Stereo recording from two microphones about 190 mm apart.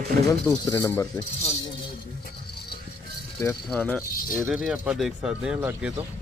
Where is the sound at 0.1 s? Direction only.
55° right (ahead or behind).